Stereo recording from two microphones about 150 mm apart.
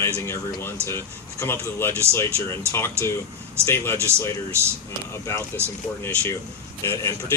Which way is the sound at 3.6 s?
15° left (ahead or behind).